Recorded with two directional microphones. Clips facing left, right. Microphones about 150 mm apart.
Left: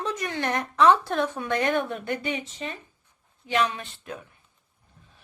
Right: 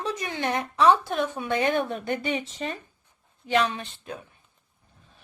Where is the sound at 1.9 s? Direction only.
30° right (ahead or behind).